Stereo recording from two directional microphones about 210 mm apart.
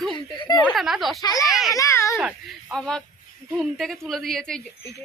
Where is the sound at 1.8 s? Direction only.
15° left (ahead or behind).